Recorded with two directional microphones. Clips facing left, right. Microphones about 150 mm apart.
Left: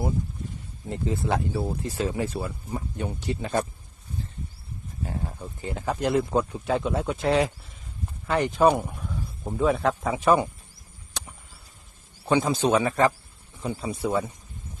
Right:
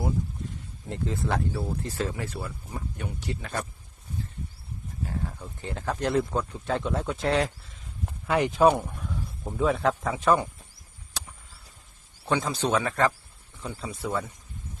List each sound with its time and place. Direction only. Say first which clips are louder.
0.9 s speech: left 3 dB; 10° left (ahead or behind)
5.0 s a sound: left 1 dB; 20° left (ahead or behind)
5.6 s a man's voice: left 2 dB; 10° left (ahead or behind)
12.3 s a man's voice: left 4 dB; 15° left (ahead or behind)